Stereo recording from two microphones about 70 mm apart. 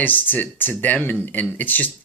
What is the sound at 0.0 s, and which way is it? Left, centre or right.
Speech, left.